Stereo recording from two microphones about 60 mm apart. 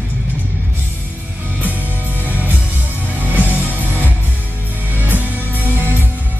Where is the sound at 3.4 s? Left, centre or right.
Right.